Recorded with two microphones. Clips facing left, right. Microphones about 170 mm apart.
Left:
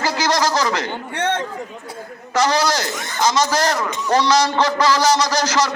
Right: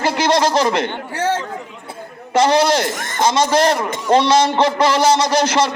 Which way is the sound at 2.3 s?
25° right (ahead or behind).